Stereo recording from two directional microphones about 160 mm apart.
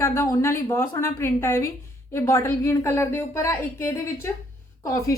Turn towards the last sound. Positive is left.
turn(degrees=20)  # may be behind; listen again after turning